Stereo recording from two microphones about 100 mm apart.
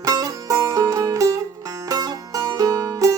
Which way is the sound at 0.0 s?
40° right (ahead or behind).